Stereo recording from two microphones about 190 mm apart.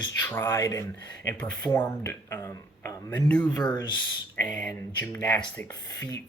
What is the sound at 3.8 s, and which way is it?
Speech, 25° left (ahead or behind).